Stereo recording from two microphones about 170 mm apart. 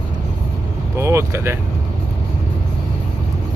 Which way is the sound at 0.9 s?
15° right (ahead or behind).